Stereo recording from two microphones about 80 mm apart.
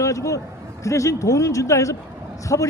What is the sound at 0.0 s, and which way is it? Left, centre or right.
A man's voice, left.